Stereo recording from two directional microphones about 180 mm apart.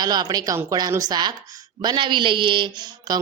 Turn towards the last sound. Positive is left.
turn(degrees=-25)  # may be behind; listen again after turning